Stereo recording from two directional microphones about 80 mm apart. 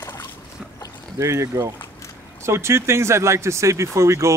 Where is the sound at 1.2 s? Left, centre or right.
Right.